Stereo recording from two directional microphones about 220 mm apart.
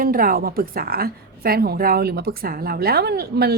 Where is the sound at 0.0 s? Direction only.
40° right (ahead or behind).